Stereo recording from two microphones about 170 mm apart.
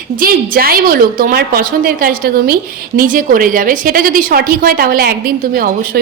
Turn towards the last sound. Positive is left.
turn(degrees=-60)  # may be behind; listen again after turning